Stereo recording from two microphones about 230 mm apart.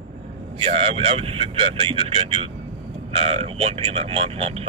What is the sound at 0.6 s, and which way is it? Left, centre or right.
Speech, right.